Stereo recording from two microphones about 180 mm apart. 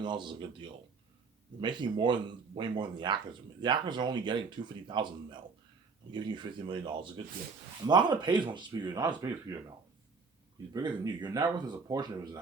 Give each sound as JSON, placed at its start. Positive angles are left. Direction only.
{"t": 0.0, "sound": "speech", "side_deg": -25}